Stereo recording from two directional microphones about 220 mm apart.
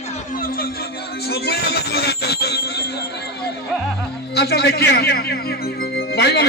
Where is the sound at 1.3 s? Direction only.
45° left (ahead or behind).